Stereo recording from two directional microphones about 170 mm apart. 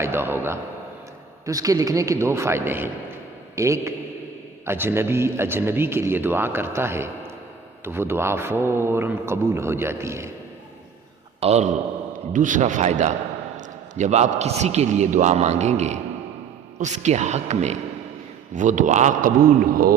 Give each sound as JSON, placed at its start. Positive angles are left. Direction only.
{"t": 0.0, "sound": "a man's voice", "side_deg": -15}
{"t": 11.3, "sound": "a man's voice", "side_deg": -40}
{"t": 12.3, "sound": "a man's voice", "side_deg": -50}